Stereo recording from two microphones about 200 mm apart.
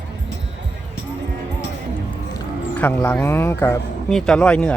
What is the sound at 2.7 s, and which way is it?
Speech, 10° left (ahead or behind).